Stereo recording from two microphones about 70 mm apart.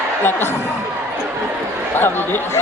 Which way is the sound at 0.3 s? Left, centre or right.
Left.